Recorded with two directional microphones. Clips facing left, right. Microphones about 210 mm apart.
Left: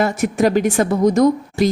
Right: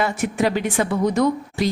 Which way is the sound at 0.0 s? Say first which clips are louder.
Left 4 dB; 45° left (ahead or behind).